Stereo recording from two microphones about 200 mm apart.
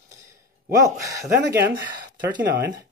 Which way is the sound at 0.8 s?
15° right (ahead or behind).